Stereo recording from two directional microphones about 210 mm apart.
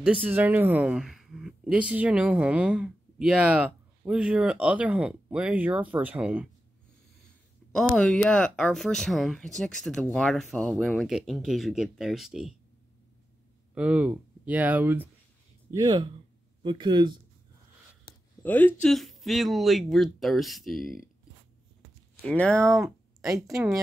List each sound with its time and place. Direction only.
0.0 s speech: 5° right (ahead or behind)
7.7 s speech: 5° left (ahead or behind)
13.7 s speech: 5° right (ahead or behind)
15.7 s speech: 20° right (ahead or behind)
18.4 s speech: 10° left (ahead or behind)
22.2 s speech: 5° left (ahead or behind)